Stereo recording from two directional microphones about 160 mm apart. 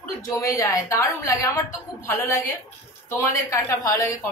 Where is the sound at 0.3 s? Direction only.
20° left (ahead or behind).